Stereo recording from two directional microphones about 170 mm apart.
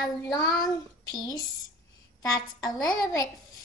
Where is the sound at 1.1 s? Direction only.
20° left (ahead or behind).